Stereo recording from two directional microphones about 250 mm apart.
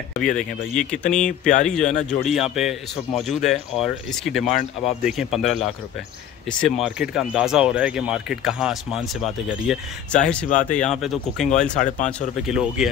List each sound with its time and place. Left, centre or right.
0.2 s speech: centre
6.6 s speech: centre
11.8 s speech: left
12.4 s speech: centre